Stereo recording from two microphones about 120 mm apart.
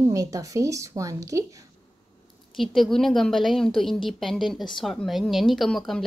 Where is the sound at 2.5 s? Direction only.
Centre (ahead or behind).